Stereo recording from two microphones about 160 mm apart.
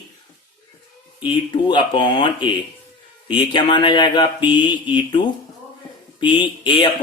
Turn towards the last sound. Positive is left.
turn(degrees=30)  # may be behind; listen again after turning